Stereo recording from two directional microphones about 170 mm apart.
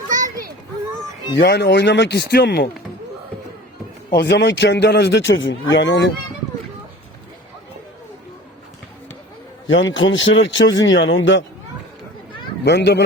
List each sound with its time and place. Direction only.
1.4 s speech: 75° left (ahead or behind)
4.1 s speech: 90° left
9.6 s speech: 90° left
12.6 s speech: 85° left